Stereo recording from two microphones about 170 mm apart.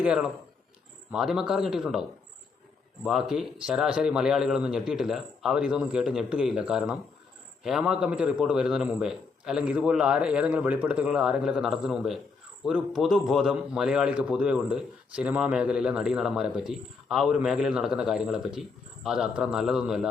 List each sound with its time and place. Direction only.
0.0 s a man's voice: 5° right (ahead or behind)